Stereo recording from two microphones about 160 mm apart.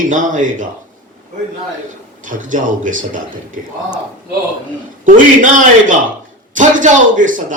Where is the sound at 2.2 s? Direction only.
55° right (ahead or behind).